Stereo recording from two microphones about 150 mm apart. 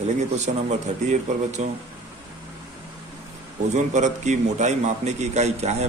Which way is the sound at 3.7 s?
50° right (ahead or behind).